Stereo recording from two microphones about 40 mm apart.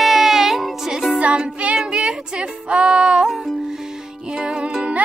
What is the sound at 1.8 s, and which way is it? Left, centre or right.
Speech, right.